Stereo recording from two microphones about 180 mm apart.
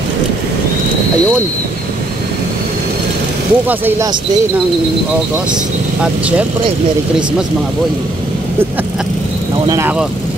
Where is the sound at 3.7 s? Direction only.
10° right (ahead or behind).